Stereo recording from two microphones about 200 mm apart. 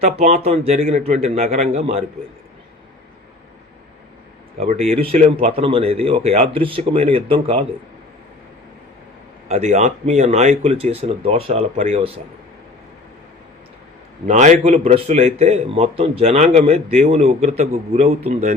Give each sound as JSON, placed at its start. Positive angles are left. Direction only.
{"t": 0.0, "sound": "a man's voice", "side_deg": -30}
{"t": 4.6, "sound": "speech", "side_deg": -30}
{"t": 9.5, "sound": "a man's voice", "side_deg": -35}
{"t": 14.3, "sound": "a man's voice", "side_deg": -35}